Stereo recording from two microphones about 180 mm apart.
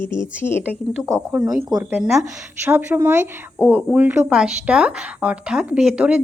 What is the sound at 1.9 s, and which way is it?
Speech, 5° right (ahead or behind).